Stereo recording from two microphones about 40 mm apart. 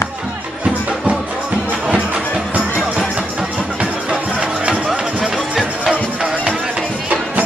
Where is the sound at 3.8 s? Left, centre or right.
Right.